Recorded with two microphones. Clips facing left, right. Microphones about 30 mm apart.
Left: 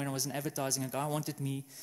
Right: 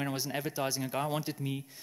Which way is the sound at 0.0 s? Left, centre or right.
Right.